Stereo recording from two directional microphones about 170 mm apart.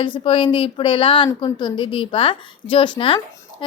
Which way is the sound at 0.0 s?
30° left (ahead or behind).